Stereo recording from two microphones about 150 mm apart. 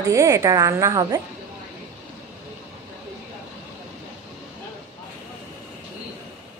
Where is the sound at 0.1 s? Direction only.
20° right (ahead or behind).